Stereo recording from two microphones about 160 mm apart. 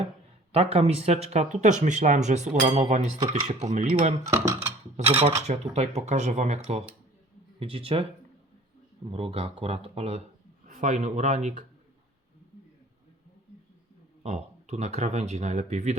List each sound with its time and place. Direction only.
0.5 s speech: 40° right (ahead or behind)
4.3 s dishes: 15° right (ahead or behind)
5.4 s speech: 45° right (ahead or behind)
9.0 s speech: 35° right (ahead or behind)
14.2 s speech: 45° right (ahead or behind)